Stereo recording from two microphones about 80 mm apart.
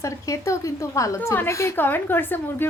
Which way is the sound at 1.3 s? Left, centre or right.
Left.